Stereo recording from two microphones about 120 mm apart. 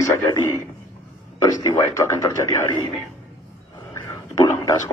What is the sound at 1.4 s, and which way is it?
A man's voice, 30° left (ahead or behind).